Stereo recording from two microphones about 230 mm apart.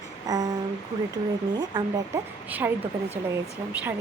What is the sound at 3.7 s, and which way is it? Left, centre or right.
Speech, centre.